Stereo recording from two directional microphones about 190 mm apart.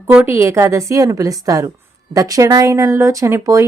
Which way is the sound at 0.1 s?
10° right (ahead or behind).